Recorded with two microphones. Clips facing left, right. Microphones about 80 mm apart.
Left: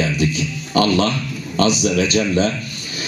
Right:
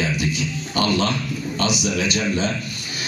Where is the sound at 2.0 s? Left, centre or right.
Left.